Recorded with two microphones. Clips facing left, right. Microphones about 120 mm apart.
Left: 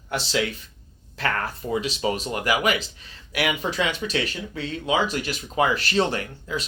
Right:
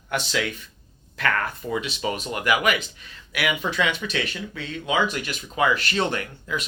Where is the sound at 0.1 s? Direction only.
35° left (ahead or behind).